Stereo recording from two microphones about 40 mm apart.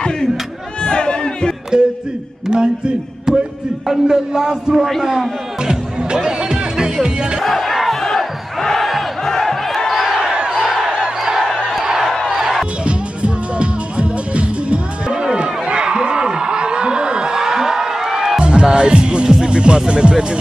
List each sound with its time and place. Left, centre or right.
0.8 s crowd: left
1.7 s a sound: right
2.5 s speech: right
3.8 s speech: centre
4.3 s speech: centre
4.7 s a man's voice: centre
5.6 s music: centre
7.4 s crowd: centre
9.3 s a sound: centre
10.5 s crowd: centre
11.1 s a sound: centre
12.3 s music: centre
12.8 s music: right; by 18.4 s centre
18.4 s music: right